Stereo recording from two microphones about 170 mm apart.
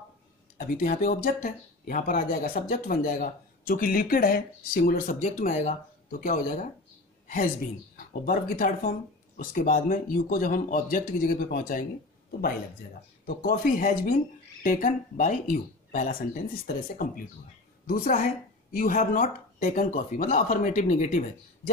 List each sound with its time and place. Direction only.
0.6 s speech: 55° left (ahead or behind)